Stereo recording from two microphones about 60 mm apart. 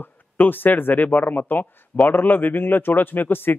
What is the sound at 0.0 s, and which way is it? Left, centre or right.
A man's voice, left.